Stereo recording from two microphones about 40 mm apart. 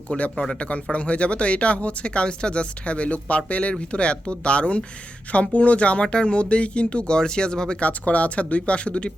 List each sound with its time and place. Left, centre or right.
0.1 s speech: left
7.8 s speech: left